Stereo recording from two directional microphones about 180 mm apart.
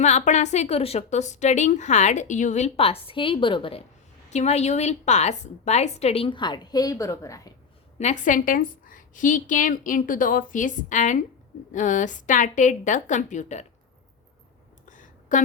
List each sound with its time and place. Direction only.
0.0 s a woman's voice: 40° left (ahead or behind); by 7.5 s 20° left (ahead or behind)
7.9 s a woman's voice: 40° left (ahead or behind)
14.8 s a sound: 45° left (ahead or behind)